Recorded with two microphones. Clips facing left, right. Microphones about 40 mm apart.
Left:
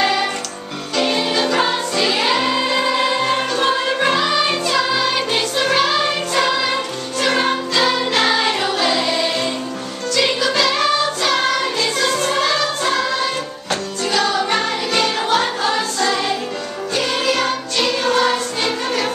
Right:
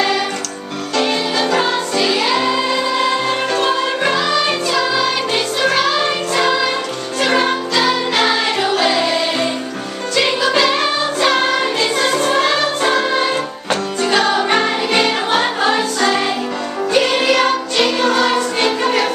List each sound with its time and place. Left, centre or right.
0.0 s music: centre
13.2 s music: right